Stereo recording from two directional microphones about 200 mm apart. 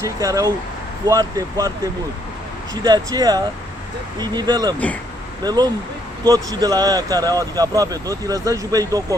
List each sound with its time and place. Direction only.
0.0 s speech: 15° right (ahead or behind)